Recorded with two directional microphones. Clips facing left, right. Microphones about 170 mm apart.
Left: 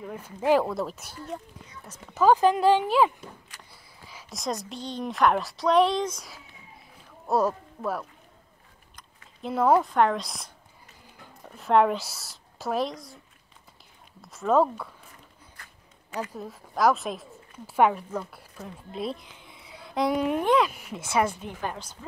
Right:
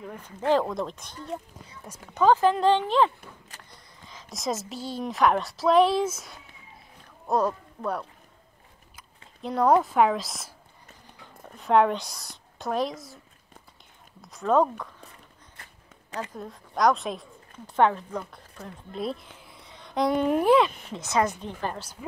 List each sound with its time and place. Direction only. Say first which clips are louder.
0.0 s speech: left 2 dB; 10° left (ahead or behind)
2.2 s speech: left 1 dB; 15° left (ahead or behind)
3.5 s a sound: right 1 dB; 10° left (ahead or behind)
4.4 s speech: right 1 dB; centre (ahead or behind)
8.9 s a sound: right 1 dB; centre (ahead or behind)
9.8 s speech: right 1 dB; 5° right (ahead or behind)
14.3 s speech: even; centre (ahead or behind)
15.5 s a sound: right 1 dB; 25° right (ahead or behind)
16.2 s speech: left 1 dB; 5° left (ahead or behind)